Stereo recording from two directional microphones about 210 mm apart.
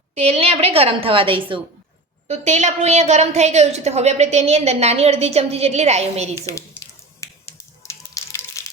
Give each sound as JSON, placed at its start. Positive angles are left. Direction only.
{"t": 0.1, "sound": "a woman's voice", "side_deg": -30}
{"t": 6.3, "sound": "speech", "side_deg": 15}
{"t": 7.2, "sound": "a sound", "side_deg": 15}